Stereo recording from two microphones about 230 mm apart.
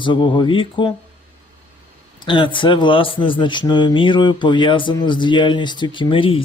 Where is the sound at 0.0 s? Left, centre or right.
Left.